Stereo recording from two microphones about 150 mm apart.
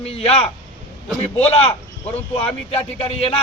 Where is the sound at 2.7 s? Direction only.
40° left (ahead or behind).